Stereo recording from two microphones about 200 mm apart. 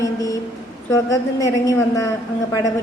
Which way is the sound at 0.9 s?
15° left (ahead or behind).